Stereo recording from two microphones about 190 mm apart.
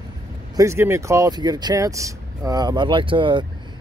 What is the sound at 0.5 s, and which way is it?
Speech, 15° right (ahead or behind).